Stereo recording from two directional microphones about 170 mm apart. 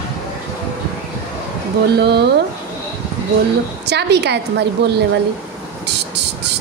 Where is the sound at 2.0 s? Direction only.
75° right (ahead or behind).